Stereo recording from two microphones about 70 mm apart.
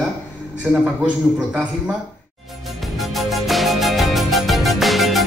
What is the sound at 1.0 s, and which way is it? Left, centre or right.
Speech, centre.